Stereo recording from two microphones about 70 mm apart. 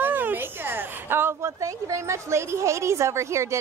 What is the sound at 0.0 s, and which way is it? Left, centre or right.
A woman's voice, right.